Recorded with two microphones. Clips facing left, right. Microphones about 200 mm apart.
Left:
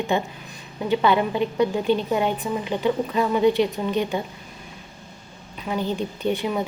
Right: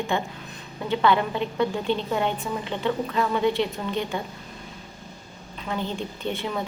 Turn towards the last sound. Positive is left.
turn(degrees=15)  # may be behind; listen again after turning